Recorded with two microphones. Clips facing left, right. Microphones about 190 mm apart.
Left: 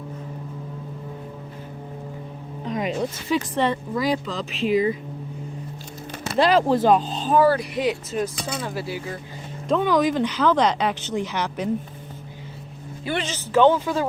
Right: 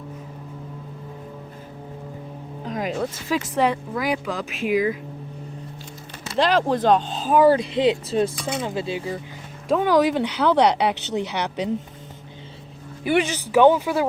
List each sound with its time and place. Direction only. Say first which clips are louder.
2.6 s speech: left 1 dB; centre (ahead or behind)
6.3 s speech: left 2 dB; 10° left (ahead or behind)
7.3 s speech: right 3 dB; 20° right (ahead or behind)
9.6 s speech: right 2 dB; 10° right (ahead or behind)
13.1 s speech: right 6 dB; 15° right (ahead or behind)